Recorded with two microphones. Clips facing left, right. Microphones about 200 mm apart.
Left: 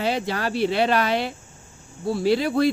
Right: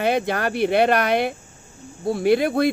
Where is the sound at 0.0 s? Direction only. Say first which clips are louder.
Right 3 dB; 55° right (ahead or behind).